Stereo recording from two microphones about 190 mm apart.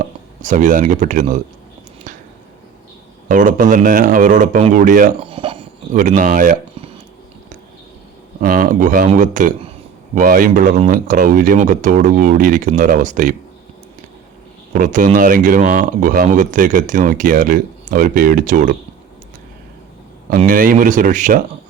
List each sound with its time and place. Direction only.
0.4 s speech: 45° right (ahead or behind)
3.2 s speech: 40° right (ahead or behind)
5.2 s speech: 30° right (ahead or behind)
8.4 s speech: 45° right (ahead or behind)
14.7 s speech: 40° right (ahead or behind)
20.5 s speech: 45° right (ahead or behind)